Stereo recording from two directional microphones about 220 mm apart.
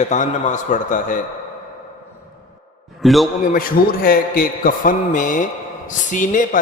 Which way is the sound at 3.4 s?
40° left (ahead or behind).